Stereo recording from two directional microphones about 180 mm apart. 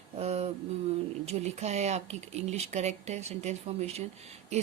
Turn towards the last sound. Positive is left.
turn(degrees=-35)  # may be behind; listen again after turning